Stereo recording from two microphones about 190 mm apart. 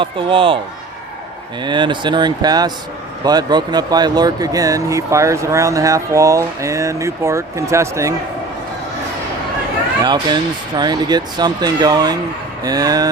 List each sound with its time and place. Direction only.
0.0 s speech: 25° right (ahead or behind)
1.6 s speech: 25° right (ahead or behind)
10.0 s speech: 20° right (ahead or behind)